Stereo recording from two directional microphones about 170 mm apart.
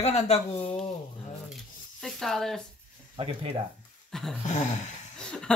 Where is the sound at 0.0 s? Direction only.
40° left (ahead or behind).